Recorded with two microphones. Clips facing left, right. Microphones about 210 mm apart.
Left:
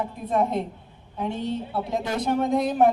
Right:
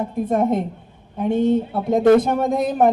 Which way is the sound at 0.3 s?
45° right (ahead or behind).